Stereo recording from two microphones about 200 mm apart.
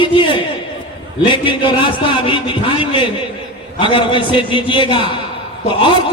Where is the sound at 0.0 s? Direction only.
25° left (ahead or behind).